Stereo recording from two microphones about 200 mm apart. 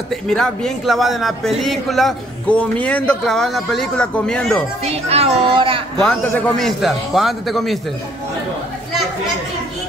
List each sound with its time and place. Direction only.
0.1 s a man's voice: 5° left (ahead or behind)
4.8 s a woman's voice: 30° right (ahead or behind)
5.9 s a man's voice: 5° left (ahead or behind)